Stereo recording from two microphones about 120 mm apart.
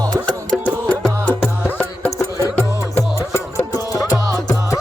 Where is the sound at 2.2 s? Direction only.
20° left (ahead or behind).